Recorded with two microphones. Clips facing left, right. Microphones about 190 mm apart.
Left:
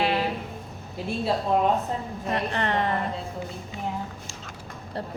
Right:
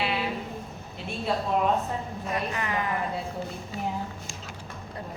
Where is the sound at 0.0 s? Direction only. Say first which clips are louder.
Left 4 dB; 45° left (ahead or behind).